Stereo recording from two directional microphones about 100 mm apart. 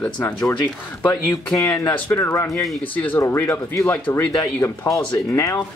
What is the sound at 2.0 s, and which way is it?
Speech, 25° left (ahead or behind).